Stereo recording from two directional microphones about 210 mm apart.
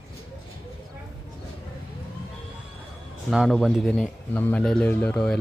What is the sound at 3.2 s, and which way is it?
A man's voice, centre (ahead or behind).